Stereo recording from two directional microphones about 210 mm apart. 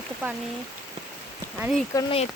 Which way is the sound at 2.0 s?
25° left (ahead or behind).